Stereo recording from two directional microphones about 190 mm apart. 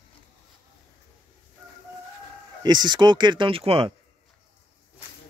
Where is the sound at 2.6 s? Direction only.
20° right (ahead or behind).